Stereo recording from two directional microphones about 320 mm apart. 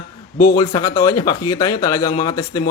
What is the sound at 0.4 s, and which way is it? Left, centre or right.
Speech, centre.